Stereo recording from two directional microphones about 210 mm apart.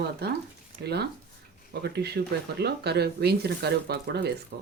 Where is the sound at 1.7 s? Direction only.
50° right (ahead or behind).